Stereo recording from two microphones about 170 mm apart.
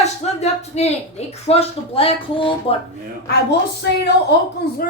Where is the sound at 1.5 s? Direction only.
35° left (ahead or behind).